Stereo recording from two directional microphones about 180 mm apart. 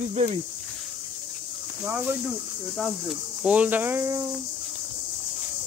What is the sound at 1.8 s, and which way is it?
Speech, 10° right (ahead or behind).